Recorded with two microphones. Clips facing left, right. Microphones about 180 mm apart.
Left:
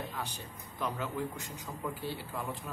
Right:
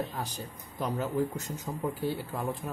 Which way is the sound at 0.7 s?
40° right (ahead or behind).